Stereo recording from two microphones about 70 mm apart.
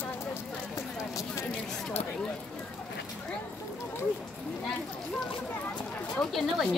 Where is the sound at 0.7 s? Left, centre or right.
Left.